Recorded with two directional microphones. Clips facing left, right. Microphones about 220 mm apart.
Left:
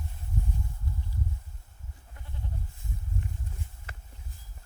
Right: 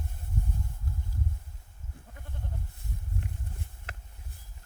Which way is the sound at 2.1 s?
55° right (ahead or behind).